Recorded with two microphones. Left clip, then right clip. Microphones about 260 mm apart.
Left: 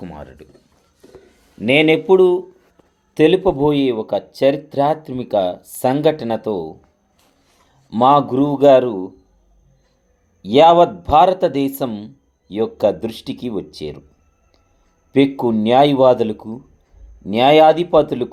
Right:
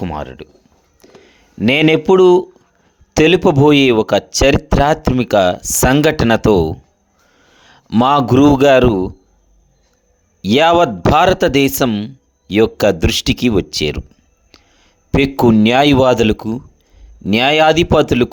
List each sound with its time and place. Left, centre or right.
0.0 s speech: right
10.4 s speech: right
14.5 s a sound: right
15.1 s speech: right